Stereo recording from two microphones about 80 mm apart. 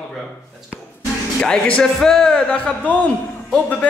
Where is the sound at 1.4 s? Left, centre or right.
Centre.